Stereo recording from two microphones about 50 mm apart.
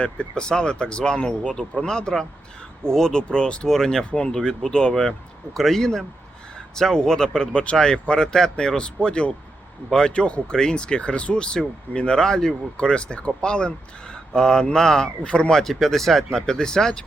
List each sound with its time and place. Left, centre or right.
0.0 s speech: left
15.6 s speech: centre